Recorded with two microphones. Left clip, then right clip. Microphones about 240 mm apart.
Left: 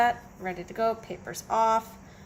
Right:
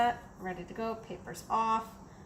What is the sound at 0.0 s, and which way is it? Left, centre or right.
A woman's voice, left.